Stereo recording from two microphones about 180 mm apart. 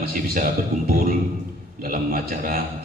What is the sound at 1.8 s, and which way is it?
Speech, 50° right (ahead or behind).